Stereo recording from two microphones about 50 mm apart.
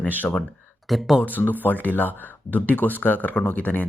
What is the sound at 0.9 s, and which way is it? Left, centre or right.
Speech, centre.